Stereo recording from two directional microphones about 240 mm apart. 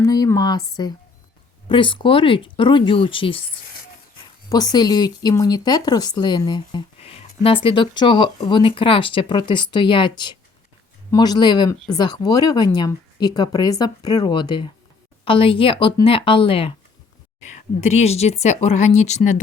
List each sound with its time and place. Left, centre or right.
0.0 s speech: centre
4.4 s speech: centre